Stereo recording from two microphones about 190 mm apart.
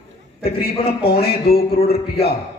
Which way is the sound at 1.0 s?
55° left (ahead or behind).